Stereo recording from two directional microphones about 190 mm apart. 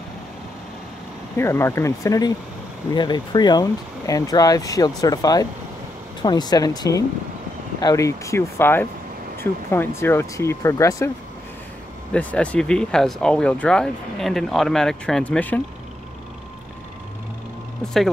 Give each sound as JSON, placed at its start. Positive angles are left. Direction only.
{"t": 1.3, "sound": "speech", "side_deg": 15}
{"t": 12.1, "sound": "speech", "side_deg": 5}